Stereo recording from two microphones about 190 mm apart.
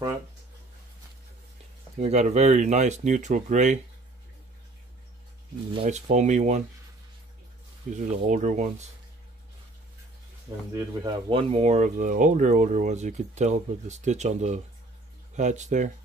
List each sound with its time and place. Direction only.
2.0 s speech: 35° right (ahead or behind)
5.7 s speech: 35° right (ahead or behind)
7.9 s speech: 40° right (ahead or behind)
10.7 s speech: 25° right (ahead or behind); by 15.9 s 40° right (ahead or behind)